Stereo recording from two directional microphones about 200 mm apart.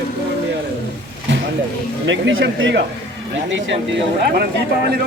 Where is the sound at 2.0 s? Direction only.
65° right (ahead or behind).